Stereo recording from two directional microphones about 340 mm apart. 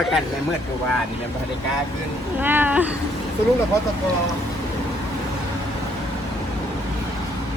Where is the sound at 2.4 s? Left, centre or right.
Centre.